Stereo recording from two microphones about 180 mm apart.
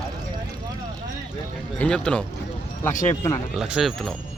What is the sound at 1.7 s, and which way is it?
Speech, 5° left (ahead or behind).